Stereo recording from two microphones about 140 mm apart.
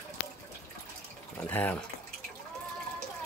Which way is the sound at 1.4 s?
15° left (ahead or behind).